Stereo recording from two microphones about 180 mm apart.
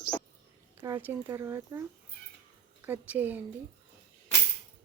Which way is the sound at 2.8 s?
10° right (ahead or behind).